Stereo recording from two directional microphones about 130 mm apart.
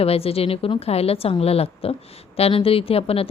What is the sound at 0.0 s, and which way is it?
A woman's voice, 50° left (ahead or behind).